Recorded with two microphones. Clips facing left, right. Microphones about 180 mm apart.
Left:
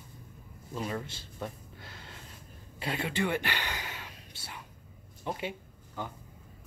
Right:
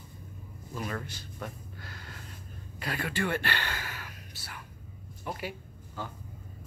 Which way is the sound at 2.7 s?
25° left (ahead or behind).